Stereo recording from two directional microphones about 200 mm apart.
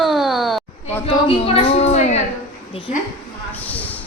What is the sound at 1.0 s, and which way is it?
A woman's voice, 30° left (ahead or behind).